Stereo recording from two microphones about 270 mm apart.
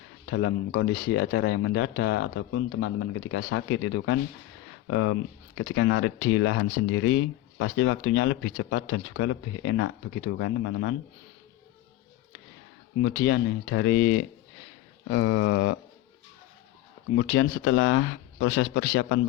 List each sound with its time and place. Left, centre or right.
0.3 s speech: left
13.0 s speech: left
17.2 s speech: left